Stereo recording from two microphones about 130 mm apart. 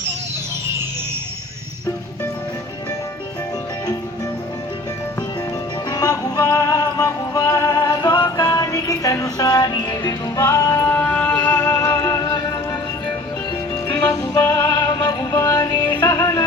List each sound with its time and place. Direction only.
5.9 s music: 30° left (ahead or behind)
10.9 s music: 10° left (ahead or behind); by 12.5 s 25° left (ahead or behind)
13.8 s music: 15° left (ahead or behind)
15.9 s music: 15° left (ahead or behind)
16.1 s music: 25° left (ahead or behind)